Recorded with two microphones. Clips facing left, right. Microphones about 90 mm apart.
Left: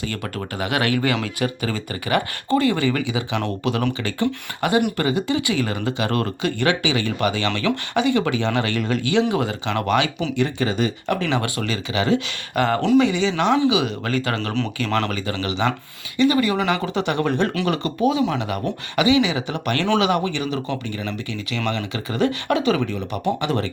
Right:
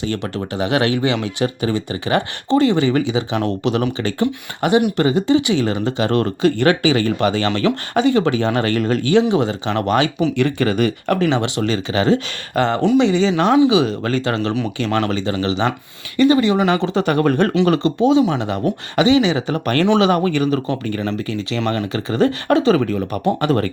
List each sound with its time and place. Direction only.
0.0 s speech: 30° right (ahead or behind)
9.3 s speech: 30° right (ahead or behind)
10.3 s speech: 65° right (ahead or behind)
11.3 s speech: 20° right (ahead or behind)
11.6 s speech: 35° right (ahead or behind); by 17.5 s 50° right (ahead or behind)
17.7 s speech: 25° right (ahead or behind); by 23.6 s 45° right (ahead or behind)